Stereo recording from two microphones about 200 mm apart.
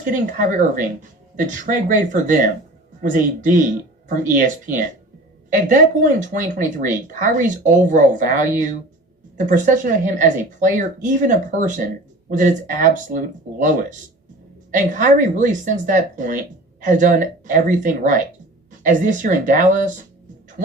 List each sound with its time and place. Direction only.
0.0 s speech: 40° right (ahead or behind)
14.8 s speech: 40° right (ahead or behind)